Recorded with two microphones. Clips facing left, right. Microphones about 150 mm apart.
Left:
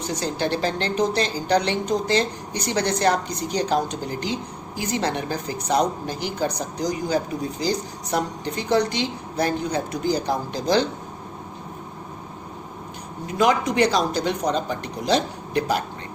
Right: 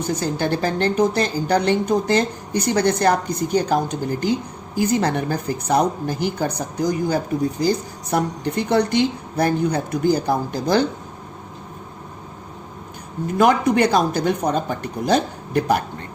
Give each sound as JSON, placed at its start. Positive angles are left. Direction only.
{"t": 0.1, "sound": "a woman's voice", "side_deg": -50}
{"t": 13.2, "sound": "speech", "side_deg": -55}